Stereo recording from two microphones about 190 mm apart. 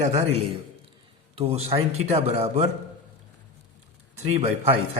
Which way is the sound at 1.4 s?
30° right (ahead or behind).